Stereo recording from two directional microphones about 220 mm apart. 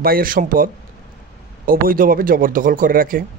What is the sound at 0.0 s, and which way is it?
Speech, 40° right (ahead or behind).